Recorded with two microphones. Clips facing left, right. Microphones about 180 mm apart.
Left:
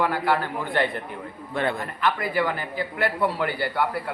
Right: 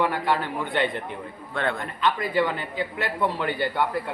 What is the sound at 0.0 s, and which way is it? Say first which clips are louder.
A man's voice: left 1 dB; 20° right (ahead or behind).